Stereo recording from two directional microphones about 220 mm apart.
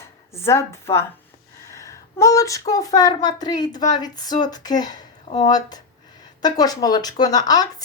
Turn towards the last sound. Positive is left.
turn(degrees=15)  # may be behind; listen again after turning